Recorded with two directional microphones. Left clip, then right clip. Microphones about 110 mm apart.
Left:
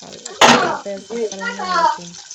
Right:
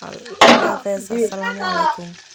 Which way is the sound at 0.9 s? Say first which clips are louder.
Right 5 dB; 20° right (ahead or behind).